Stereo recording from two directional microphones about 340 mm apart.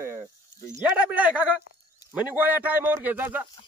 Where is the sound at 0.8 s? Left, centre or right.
Centre.